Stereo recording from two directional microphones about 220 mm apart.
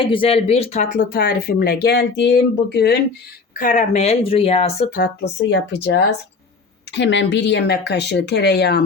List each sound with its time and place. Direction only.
0.0 s speech: 25° left (ahead or behind)
1.1 s speech: 45° left (ahead or behind)
3.5 s speech: 35° left (ahead or behind)
4.9 s speech: 55° left (ahead or behind)